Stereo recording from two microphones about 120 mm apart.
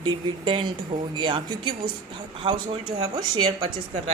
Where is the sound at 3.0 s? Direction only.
35° right (ahead or behind).